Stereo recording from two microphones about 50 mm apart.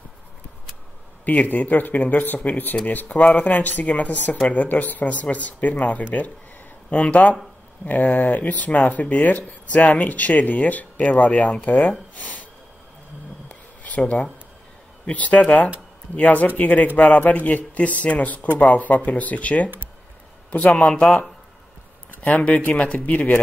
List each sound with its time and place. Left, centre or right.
1.2 s speech: left
13.5 s a sound: left
15.0 s speech: left